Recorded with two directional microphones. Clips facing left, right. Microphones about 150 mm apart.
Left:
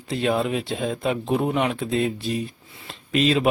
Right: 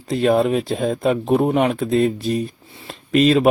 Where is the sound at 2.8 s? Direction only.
45° right (ahead or behind).